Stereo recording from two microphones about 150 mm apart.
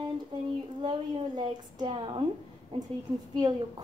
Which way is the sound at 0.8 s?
30° right (ahead or behind).